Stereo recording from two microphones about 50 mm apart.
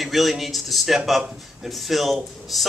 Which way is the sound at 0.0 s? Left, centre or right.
Centre.